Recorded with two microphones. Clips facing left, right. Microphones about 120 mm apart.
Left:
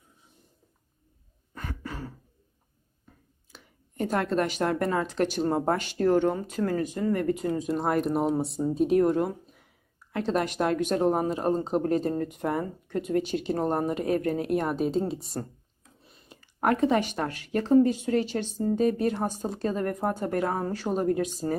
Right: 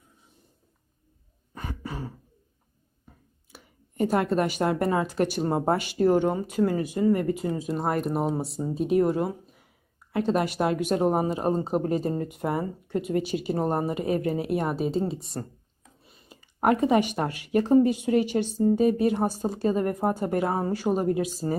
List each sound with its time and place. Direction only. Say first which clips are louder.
1.5 s throat clearing: right 2 dB; 15° right (ahead or behind)
3.5 s speech: right 2 dB; 10° right (ahead or behind)